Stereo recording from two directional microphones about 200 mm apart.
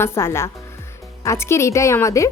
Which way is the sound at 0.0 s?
10° left (ahead or behind).